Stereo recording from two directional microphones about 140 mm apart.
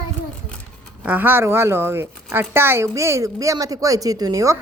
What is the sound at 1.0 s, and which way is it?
Speech, 15° right (ahead or behind).